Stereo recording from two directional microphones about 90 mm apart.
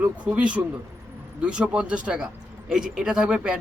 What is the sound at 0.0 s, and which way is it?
A man's voice, 15° right (ahead or behind).